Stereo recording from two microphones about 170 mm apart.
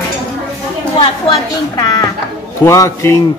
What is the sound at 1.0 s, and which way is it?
A man's voice, 20° left (ahead or behind).